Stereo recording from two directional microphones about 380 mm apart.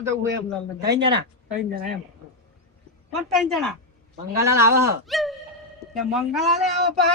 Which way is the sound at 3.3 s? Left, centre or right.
Centre.